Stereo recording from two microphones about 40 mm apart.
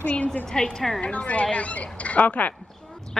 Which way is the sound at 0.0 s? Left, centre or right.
Left.